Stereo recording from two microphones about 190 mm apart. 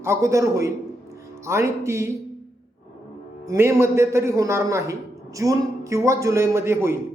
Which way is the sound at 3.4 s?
15° right (ahead or behind).